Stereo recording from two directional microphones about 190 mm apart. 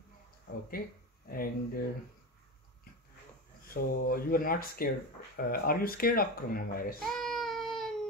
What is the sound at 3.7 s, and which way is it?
Speech, 50° left (ahead or behind).